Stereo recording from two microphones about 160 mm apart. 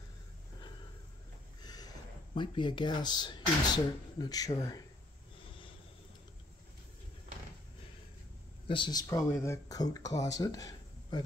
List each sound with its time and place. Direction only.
1.6 s a sound: 25° left (ahead or behind)
2.3 s speech: 30° left (ahead or behind)
8.6 s speech: 30° left (ahead or behind)